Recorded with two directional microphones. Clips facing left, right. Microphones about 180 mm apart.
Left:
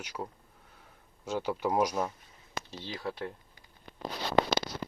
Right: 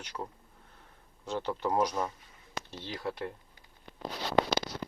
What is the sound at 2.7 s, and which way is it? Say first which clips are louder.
Speech: right 1 dB; centre (ahead or behind).